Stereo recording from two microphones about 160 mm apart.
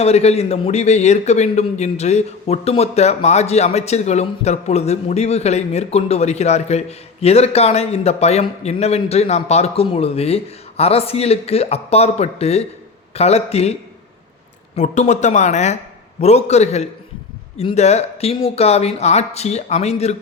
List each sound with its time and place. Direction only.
0.0 s a man's voice: 40° left (ahead or behind)
14.8 s a man's voice: 45° left (ahead or behind)